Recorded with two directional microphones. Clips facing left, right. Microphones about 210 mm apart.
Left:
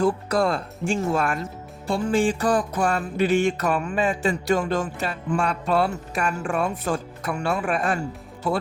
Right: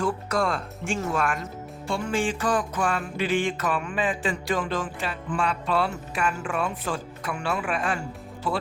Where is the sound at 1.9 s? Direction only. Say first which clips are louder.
Left 5 dB; 35° left (ahead or behind).